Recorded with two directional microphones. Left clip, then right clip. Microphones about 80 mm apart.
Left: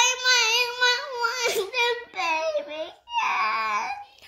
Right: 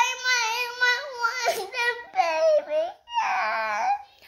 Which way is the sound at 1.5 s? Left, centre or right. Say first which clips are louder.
Left 1 dB; right.